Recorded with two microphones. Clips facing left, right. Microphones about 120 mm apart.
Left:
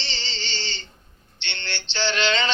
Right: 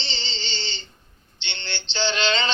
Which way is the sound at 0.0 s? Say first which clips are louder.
Even; 25° right (ahead or behind).